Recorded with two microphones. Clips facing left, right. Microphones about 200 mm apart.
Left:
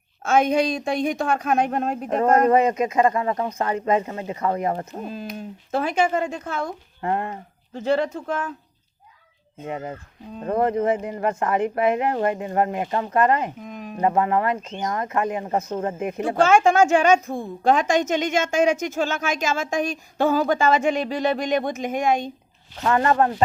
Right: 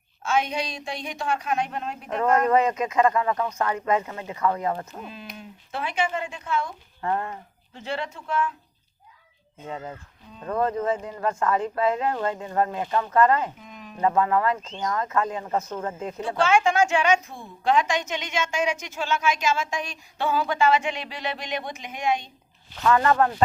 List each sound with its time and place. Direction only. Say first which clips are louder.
0.2 s a woman's voice: left 7 dB; 50° left (ahead or behind)
2.5 s speech: left 3 dB; 20° left (ahead or behind); by 6.7 s 45° left (ahead or behind)
7.0 s speech: left 2 dB; 25° left (ahead or behind)
7.7 s speech: left 10 dB; 40° left (ahead or behind)
9.6 s speech: left 4 dB; 20° left (ahead or behind)
13.6 s a woman's voice: left 8 dB; 50° left (ahead or behind)
14.0 s speech: left 1 dB; 20° left (ahead or behind)
15.7 s speech: left 5 dB; 30° left (ahead or behind)
16.0 s speech: left 5 dB; 15° left (ahead or behind)
16.2 s a woman's voice: left 4 dB; 45° left (ahead or behind)
22.8 s speech: left 1 dB; 30° left (ahead or behind)